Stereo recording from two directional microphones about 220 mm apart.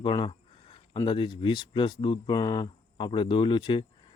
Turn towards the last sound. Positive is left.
turn(degrees=20)  # may be behind; listen again after turning